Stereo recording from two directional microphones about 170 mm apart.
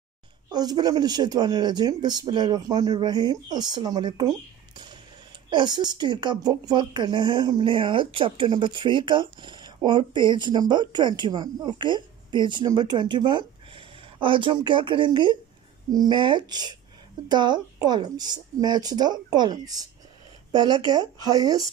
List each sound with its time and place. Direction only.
0.5 s speech: 25° right (ahead or behind)